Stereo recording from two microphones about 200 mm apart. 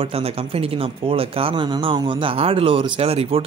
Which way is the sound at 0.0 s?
30° right (ahead or behind).